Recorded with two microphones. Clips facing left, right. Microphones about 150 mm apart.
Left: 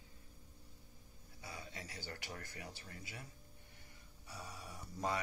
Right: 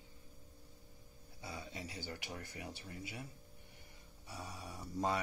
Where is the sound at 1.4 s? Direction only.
25° right (ahead or behind).